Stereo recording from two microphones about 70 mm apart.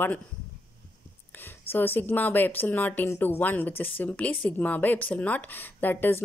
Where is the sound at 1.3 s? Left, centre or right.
Left.